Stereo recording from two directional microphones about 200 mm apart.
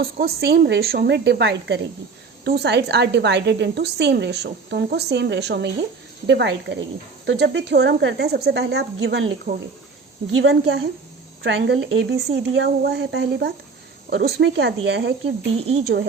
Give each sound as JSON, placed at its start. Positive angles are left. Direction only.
{"t": 0.0, "sound": "a woman's voice", "side_deg": -50}
{"t": 10.3, "sound": "a woman's voice", "side_deg": -70}
{"t": 12.4, "sound": "a woman's voice", "side_deg": -55}
{"t": 15.5, "sound": "speech", "side_deg": -30}
{"t": 15.8, "sound": "speech", "side_deg": -50}